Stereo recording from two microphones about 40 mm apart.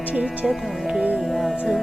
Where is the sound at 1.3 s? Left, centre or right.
Centre.